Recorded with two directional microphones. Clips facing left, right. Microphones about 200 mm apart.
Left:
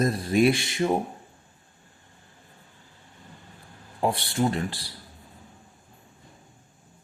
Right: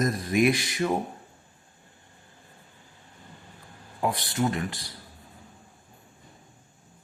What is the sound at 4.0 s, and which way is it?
Speech, 30° left (ahead or behind).